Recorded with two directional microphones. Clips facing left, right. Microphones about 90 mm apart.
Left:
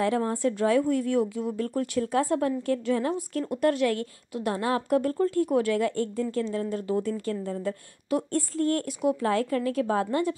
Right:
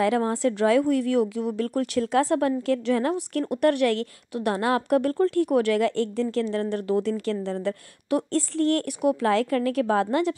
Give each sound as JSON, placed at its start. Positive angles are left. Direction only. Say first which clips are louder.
{"t": 0.0, "sound": "speech", "louder": "right 3 dB", "side_deg": -90}